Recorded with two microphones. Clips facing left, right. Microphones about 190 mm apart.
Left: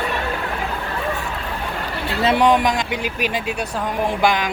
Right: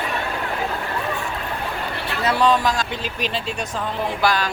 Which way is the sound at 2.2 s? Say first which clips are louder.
Left 2 dB; 20° left (ahead or behind).